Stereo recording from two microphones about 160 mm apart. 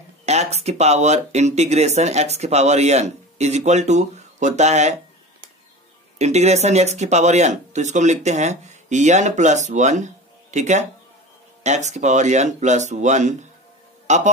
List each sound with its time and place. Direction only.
0.2 s speech: 45° right (ahead or behind)
6.1 s speech: 45° right (ahead or behind)